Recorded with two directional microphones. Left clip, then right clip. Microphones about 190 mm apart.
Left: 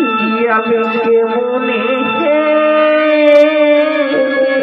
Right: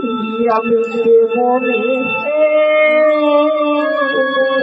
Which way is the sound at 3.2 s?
20° right (ahead or behind).